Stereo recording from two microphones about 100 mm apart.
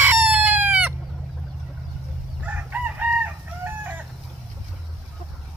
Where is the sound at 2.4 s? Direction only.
15° right (ahead or behind).